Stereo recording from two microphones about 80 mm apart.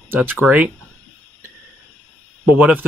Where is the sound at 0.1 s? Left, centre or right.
Right.